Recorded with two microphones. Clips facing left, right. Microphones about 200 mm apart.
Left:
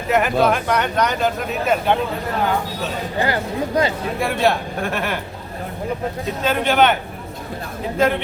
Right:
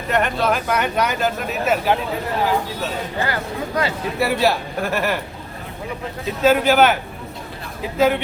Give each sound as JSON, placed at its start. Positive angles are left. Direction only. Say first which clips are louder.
{"t": 0.1, "sound": "speech", "louder": "left 3 dB", "side_deg": 0}
{"t": 3.2, "sound": "speech", "louder": "left 5 dB", "side_deg": 25}
{"t": 4.2, "sound": "speech", "louder": "even", "side_deg": -5}
{"t": 6.2, "sound": "speech", "louder": "right 5 dB", "side_deg": -5}
{"t": 7.9, "sound": "speech", "louder": "right 1 dB", "side_deg": -5}